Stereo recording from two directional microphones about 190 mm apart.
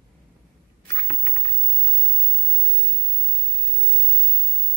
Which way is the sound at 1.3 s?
25° left (ahead or behind).